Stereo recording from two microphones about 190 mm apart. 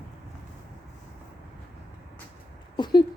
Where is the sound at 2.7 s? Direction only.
25° left (ahead or behind).